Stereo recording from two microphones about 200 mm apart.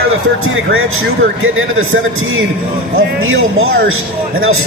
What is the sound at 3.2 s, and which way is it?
Speech, 90° right.